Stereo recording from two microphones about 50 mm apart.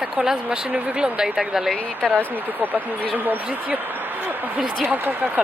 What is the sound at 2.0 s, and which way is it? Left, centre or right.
Speech, centre.